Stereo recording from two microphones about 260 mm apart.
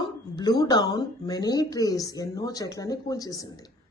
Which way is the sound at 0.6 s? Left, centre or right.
Centre.